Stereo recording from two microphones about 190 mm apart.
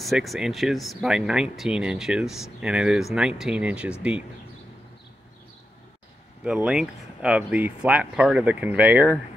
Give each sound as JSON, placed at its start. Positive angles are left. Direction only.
{"t": 0.0, "sound": "speech", "side_deg": 0}
{"t": 6.4, "sound": "speech", "side_deg": -5}